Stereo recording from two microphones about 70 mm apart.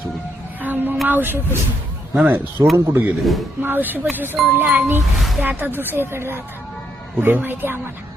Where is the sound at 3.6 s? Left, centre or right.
Right.